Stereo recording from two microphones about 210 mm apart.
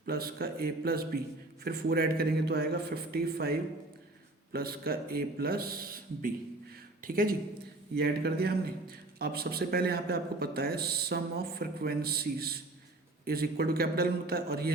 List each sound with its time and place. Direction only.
0.0 s a man's voice: 45° right (ahead or behind)
4.5 s a man's voice: 45° right (ahead or behind)